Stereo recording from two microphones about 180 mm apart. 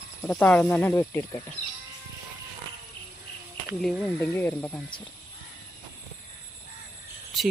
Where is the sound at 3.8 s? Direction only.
Centre (ahead or behind).